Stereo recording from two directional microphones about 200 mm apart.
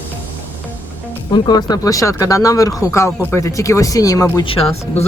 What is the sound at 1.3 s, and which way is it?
Speech, 20° left (ahead or behind).